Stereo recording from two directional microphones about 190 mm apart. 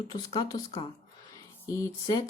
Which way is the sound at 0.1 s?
20° left (ahead or behind).